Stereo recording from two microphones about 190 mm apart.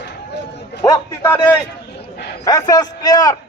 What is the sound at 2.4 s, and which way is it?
Speech, 20° left (ahead or behind).